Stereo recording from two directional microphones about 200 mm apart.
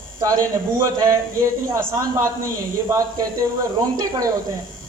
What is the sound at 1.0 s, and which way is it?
A woman's voice, 15° right (ahead or behind).